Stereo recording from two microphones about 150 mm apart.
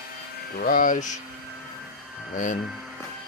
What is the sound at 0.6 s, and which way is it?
Speech, 65° left (ahead or behind).